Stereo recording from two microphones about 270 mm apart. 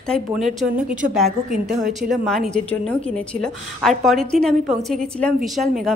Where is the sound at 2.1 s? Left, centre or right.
Centre.